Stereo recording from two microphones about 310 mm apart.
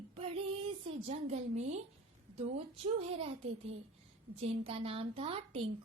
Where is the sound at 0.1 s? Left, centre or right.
Centre.